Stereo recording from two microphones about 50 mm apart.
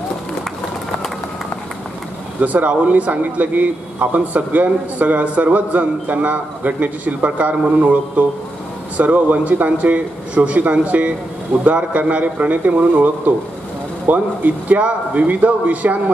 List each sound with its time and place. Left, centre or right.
2.4 s a man's voice: right